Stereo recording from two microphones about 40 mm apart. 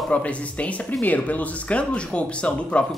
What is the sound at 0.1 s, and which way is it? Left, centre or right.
Speech, left.